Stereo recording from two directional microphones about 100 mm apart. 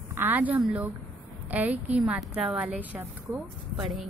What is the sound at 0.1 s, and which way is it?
A woman's voice, 20° right (ahead or behind).